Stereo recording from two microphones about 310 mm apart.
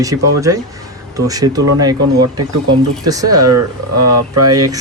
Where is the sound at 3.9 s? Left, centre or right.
Right.